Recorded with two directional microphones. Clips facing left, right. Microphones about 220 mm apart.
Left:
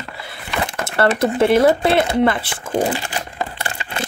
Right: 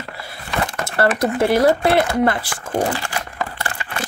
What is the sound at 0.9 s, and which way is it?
Speech, 25° left (ahead or behind).